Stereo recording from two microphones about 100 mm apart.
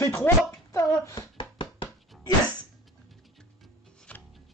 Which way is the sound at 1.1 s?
55° left (ahead or behind).